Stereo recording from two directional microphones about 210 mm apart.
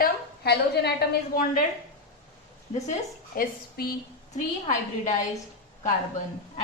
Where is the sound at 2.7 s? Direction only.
40° left (ahead or behind).